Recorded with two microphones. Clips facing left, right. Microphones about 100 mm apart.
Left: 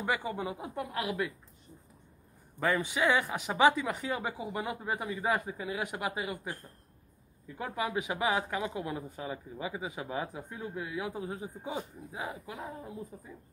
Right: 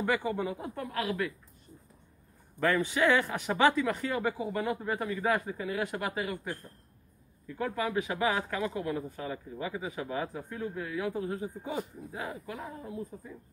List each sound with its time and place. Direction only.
0.0 s speech: 15° left (ahead or behind)
2.6 s speech: 15° left (ahead or behind)